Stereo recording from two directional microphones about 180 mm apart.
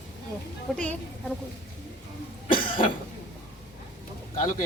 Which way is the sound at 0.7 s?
Centre (ahead or behind).